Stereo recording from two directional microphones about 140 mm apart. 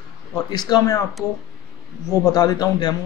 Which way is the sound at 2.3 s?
25° left (ahead or behind).